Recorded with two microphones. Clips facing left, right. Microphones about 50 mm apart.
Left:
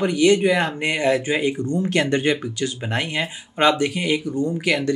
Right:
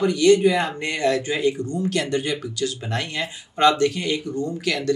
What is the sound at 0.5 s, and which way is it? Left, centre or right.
Speech, centre.